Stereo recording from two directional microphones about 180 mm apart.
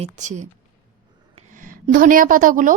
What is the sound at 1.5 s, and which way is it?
A woman's voice, 50° right (ahead or behind).